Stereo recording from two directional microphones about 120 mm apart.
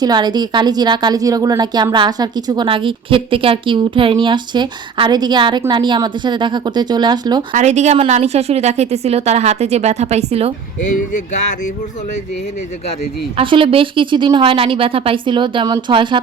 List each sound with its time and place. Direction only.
0.0 s a woman's voice: 35° right (ahead or behind)
7.5 s a woman's voice: 70° right (ahead or behind)
13.3 s speech: 45° right (ahead or behind)